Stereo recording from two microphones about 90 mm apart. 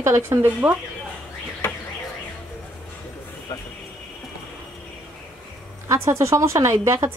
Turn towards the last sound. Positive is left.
turn(degrees=-30)  # may be behind; listen again after turning